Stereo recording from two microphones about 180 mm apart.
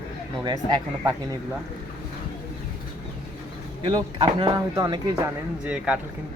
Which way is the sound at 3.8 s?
30° right (ahead or behind).